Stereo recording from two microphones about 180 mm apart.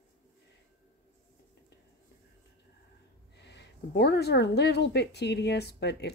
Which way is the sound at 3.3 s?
70° left (ahead or behind).